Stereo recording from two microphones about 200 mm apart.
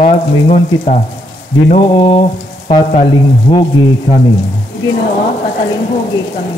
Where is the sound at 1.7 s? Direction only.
30° left (ahead or behind).